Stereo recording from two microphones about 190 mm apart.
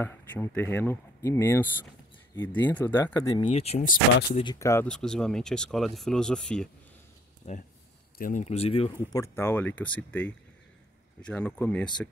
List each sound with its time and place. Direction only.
0.0 s speech: 10° left (ahead or behind)
3.3 s speech: 30° left (ahead or behind)
4.6 s speech: 15° left (ahead or behind)
4.8 s speech: 5° left (ahead or behind)
7.4 s speech: 35° left (ahead or behind)
9.1 s speech: 15° left (ahead or behind)